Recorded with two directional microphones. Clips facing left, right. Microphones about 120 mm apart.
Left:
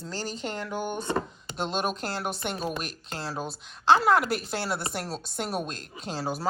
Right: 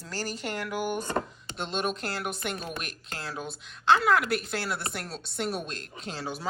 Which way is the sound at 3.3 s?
35° left (ahead or behind).